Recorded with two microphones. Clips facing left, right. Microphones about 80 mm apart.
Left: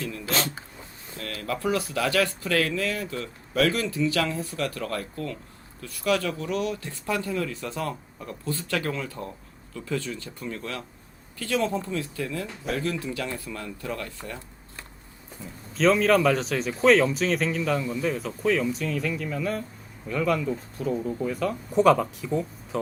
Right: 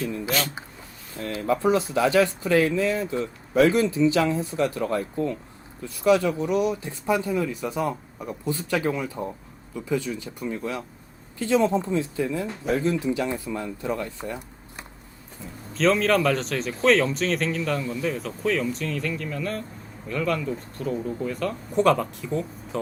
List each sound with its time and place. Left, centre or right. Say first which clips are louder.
0.0 s a sound: right 4 dB; right
1.1 s speech: right 7 dB; right
15.7 s a man's voice: left 1 dB; centre